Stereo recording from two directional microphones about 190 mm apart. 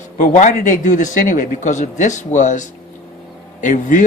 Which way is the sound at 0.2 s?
40° left (ahead or behind).